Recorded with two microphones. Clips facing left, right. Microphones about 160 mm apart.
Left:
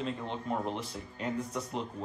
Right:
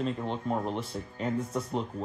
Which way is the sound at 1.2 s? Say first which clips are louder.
Right 4 dB; 30° right (ahead or behind).